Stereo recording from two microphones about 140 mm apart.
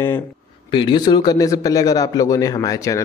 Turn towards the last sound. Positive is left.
turn(degrees=25)  # may be behind; listen again after turning